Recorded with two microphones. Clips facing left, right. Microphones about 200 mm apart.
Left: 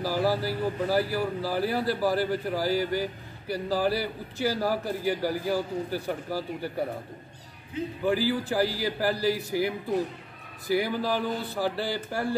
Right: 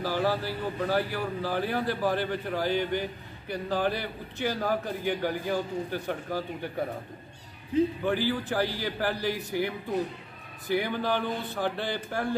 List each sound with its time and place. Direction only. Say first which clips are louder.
0.0 s a man's voice: left 2 dB; 10° left (ahead or behind)
8.0 s a man's voice: left 2 dB; 5° left (ahead or behind)